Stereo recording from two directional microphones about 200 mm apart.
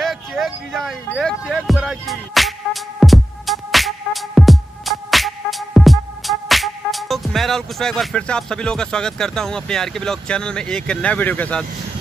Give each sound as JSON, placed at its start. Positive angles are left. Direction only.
{"t": 0.0, "sound": "music", "side_deg": 0}